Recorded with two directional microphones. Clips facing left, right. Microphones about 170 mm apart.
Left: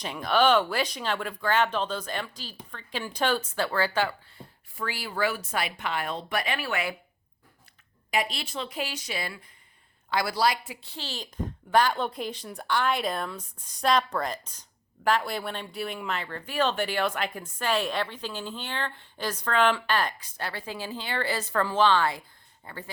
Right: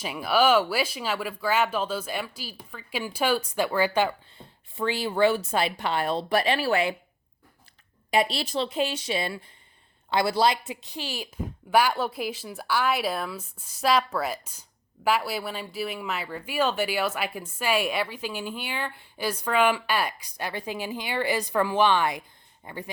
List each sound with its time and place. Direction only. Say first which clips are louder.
0.0 s speech: right 1 dB; 5° right (ahead or behind); by 6.9 s 30° right (ahead or behind)
8.1 s a woman's voice: right 5 dB; 30° right (ahead or behind)